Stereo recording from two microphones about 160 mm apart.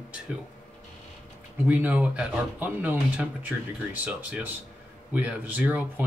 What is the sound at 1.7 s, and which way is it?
Speech, 10° right (ahead or behind).